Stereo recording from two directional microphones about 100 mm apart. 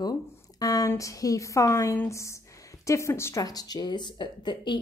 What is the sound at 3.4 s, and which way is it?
Speech, 40° left (ahead or behind).